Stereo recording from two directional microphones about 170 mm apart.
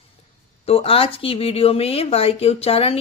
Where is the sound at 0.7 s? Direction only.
35° left (ahead or behind).